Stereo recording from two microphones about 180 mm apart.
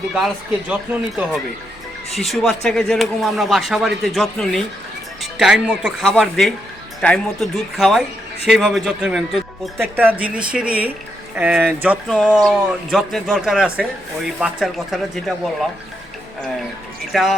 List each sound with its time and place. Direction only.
0.7 s a woman's voice: 5° right (ahead or behind)
17.1 s speech: centre (ahead or behind)